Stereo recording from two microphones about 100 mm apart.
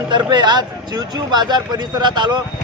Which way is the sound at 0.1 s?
50° right (ahead or behind).